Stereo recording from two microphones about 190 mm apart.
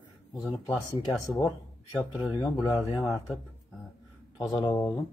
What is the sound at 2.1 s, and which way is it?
Speech, centre (ahead or behind).